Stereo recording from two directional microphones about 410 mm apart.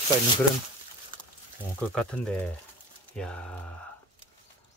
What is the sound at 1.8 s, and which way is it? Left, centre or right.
Speech, centre.